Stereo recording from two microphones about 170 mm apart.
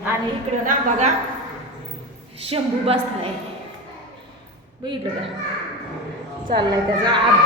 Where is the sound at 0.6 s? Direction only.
45° right (ahead or behind).